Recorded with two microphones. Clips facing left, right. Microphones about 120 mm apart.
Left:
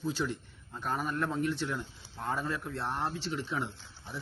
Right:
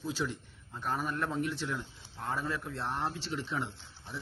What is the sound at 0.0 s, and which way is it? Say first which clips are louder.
A man's voice: left 2 dB; 5° right (ahead or behind).